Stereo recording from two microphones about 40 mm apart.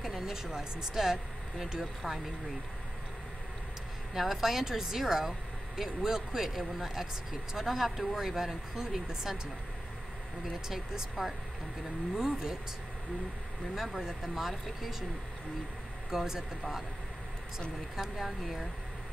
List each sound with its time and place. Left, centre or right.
0.0 s speech: centre
4.1 s speech: centre
10.7 s speech: centre
13.7 s speech: centre
16.1 s speech: centre
17.9 s speech: centre